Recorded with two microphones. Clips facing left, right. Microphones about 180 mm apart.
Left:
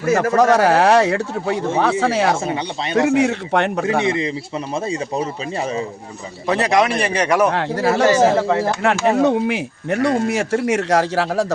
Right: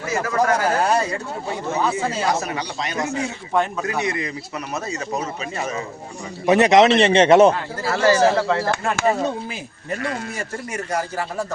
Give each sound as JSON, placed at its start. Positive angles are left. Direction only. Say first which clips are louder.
{"t": 0.0, "sound": "a man's voice", "louder": "left 6 dB", "side_deg": 60}
{"t": 2.9, "sound": "a man's voice", "louder": "left 12 dB", "side_deg": 75}
{"t": 3.8, "sound": "speech", "louder": "left 6 dB", "side_deg": 25}
{"t": 6.5, "sound": "a man's voice", "louder": "right 3 dB", "side_deg": -20}
{"t": 7.5, "sound": "speech", "louder": "left 7 dB", "side_deg": 80}
{"t": 7.9, "sound": "speech", "louder": "left 2 dB", "side_deg": 20}
{"t": 9.0, "sound": "a man's voice", "louder": "left 6 dB", "side_deg": 75}
{"t": 10.0, "sound": "speech", "louder": "left 11 dB", "side_deg": 35}
{"t": 10.2, "sound": "speech", "louder": "left 12 dB", "side_deg": 85}